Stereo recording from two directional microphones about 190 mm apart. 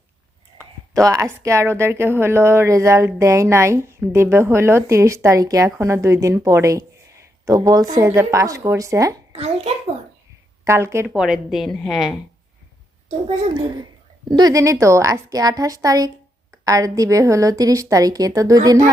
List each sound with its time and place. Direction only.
1.0 s a woman's voice: 15° right (ahead or behind)
9.3 s a sound: 35° right (ahead or behind)
10.6 s a woman's voice: 15° right (ahead or behind); by 12.0 s centre (ahead or behind)
13.2 s a child's voice: 25° right (ahead or behind)